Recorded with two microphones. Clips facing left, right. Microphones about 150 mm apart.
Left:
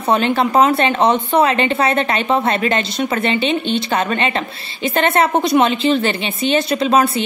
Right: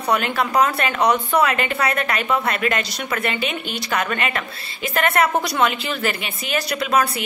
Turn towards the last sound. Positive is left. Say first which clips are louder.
# left 5 dB
turn(degrees=25)  # may be behind; listen again after turning